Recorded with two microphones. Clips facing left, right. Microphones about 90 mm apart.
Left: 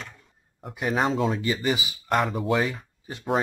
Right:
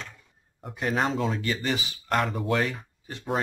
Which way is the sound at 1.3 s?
15° left (ahead or behind).